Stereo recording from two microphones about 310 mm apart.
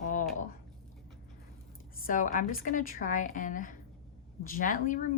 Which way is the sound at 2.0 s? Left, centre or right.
Left.